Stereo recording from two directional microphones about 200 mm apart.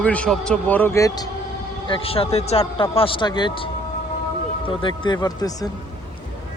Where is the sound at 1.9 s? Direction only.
30° left (ahead or behind).